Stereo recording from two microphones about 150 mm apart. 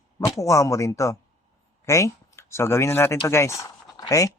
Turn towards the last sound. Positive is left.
turn(degrees=25)  # may be behind; listen again after turning